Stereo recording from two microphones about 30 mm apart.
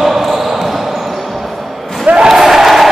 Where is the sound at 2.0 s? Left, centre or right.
Right.